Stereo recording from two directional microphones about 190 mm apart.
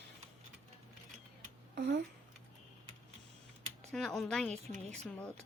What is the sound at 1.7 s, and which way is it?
Speech, 60° right (ahead or behind).